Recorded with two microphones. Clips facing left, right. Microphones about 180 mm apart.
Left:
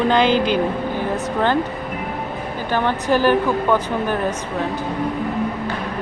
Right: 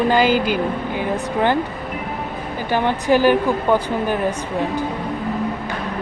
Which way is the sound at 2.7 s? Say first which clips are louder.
Right 2 dB; 15° right (ahead or behind).